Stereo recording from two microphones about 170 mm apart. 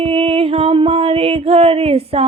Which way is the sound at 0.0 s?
35° right (ahead or behind).